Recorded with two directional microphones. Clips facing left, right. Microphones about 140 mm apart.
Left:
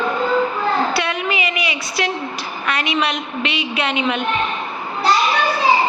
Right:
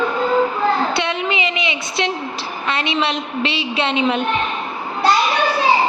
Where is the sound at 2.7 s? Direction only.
25° right (ahead or behind).